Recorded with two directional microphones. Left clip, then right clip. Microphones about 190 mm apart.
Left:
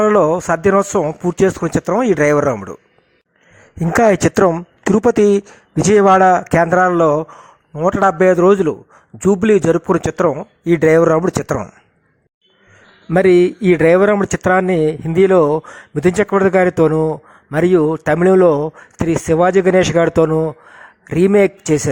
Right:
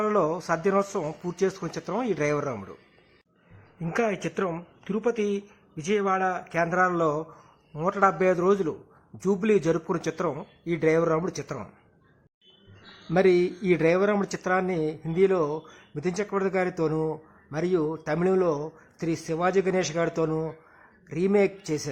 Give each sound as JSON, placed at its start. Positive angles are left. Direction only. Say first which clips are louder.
{"t": 0.0, "sound": "a man's voice", "louder": "left 13 dB", "side_deg": 40}
{"t": 3.9, "sound": "a man's voice", "louder": "left 15 dB", "side_deg": 50}
{"t": 13.1, "sound": "a man's voice", "louder": "left 10 dB", "side_deg": 40}